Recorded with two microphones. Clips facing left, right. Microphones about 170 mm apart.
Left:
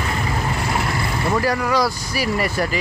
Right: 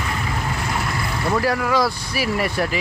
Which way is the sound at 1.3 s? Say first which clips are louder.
Even; centre (ahead or behind).